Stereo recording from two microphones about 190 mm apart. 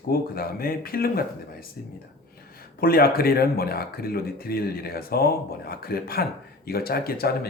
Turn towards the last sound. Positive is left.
turn(degrees=55)  # may be behind; listen again after turning